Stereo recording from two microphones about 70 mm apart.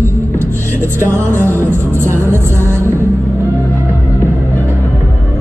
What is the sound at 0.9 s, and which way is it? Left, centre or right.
Music, right.